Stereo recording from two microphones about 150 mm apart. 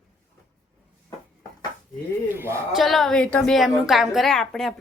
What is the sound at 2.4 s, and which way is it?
Speech, 15° right (ahead or behind).